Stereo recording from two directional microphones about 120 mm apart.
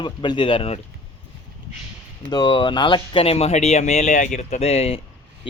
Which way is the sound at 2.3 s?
40° left (ahead or behind).